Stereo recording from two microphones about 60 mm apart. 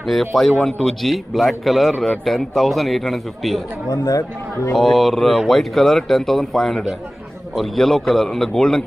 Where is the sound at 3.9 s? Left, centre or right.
Left.